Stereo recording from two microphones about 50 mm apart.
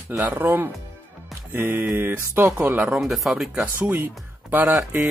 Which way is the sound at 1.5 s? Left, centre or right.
Right.